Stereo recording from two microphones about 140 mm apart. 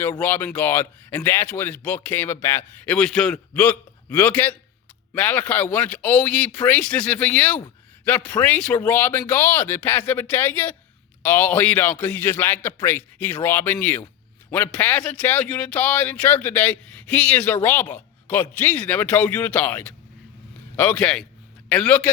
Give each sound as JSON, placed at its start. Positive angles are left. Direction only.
{"t": 0.0, "sound": "a man's voice", "side_deg": 15}